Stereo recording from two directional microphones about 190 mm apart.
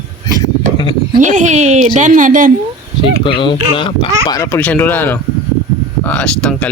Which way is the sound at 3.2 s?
25° left (ahead or behind).